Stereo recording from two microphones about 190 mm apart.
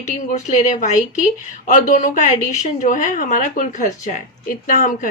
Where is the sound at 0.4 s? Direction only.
40° left (ahead or behind).